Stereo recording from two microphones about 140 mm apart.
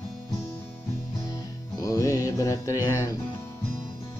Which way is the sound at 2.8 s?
20° left (ahead or behind).